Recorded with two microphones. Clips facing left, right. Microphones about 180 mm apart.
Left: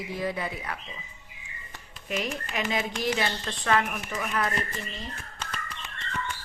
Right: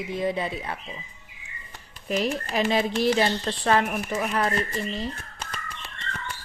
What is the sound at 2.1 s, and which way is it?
Speech, 35° right (ahead or behind).